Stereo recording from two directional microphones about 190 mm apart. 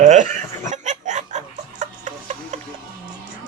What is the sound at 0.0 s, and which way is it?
Chuckle, 40° right (ahead or behind).